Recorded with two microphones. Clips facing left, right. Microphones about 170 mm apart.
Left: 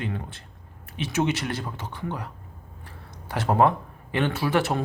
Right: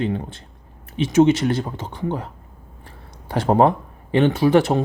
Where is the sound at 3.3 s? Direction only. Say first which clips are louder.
Right 5 dB; 25° right (ahead or behind).